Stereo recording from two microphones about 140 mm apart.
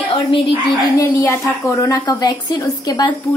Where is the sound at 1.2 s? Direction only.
20° left (ahead or behind).